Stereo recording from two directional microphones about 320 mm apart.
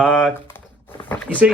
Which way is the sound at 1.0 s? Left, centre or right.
Centre.